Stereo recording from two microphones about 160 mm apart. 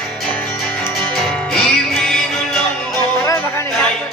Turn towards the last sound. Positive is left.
turn(degrees=15)  # may be behind; listen again after turning